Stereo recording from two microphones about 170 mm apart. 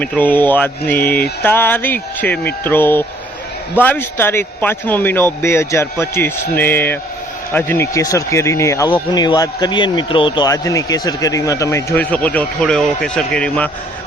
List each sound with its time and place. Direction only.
0.0 s a man's voice: 10° left (ahead or behind)